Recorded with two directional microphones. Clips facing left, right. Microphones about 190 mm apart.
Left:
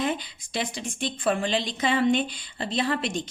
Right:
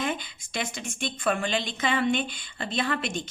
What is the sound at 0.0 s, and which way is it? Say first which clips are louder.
A woman's voice: left 3 dB; 35° left (ahead or behind).